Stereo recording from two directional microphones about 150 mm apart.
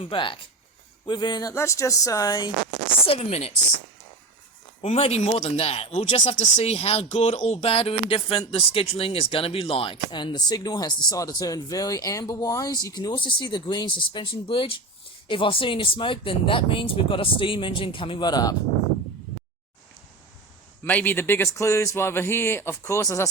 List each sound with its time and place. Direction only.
0.0 s speech: 35° left (ahead or behind)
3.1 s a woman's voice: 40° left (ahead or behind)
4.8 s speech: 40° left (ahead or behind)
20.8 s speech: 10° left (ahead or behind)